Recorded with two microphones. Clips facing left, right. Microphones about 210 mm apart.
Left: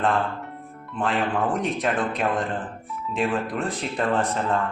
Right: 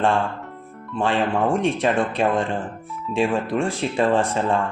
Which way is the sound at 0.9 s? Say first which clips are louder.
Right 3 dB; 25° right (ahead or behind).